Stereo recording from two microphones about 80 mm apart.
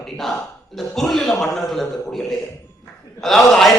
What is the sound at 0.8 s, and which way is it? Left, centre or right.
A man's voice, centre.